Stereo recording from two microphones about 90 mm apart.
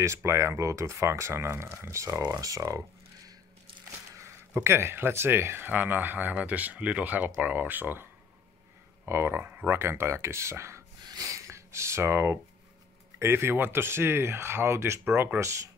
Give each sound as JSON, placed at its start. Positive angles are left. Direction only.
{"t": 0.0, "sound": "speech", "side_deg": -30}
{"t": 4.1, "sound": "speech", "side_deg": -30}
{"t": 11.1, "sound": "a sound", "side_deg": -40}
{"t": 13.2, "sound": "speech", "side_deg": -30}